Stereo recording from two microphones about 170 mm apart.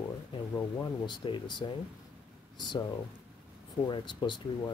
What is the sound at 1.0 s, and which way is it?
Speech, 25° left (ahead or behind).